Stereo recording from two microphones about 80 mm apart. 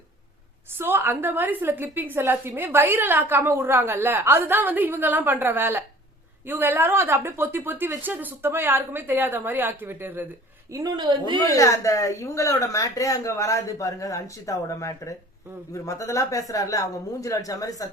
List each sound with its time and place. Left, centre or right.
0.8 s a woman's voice: right
10.7 s a woman's voice: right
11.5 s speech: left